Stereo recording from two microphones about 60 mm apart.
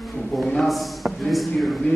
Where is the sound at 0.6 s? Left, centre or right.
Centre.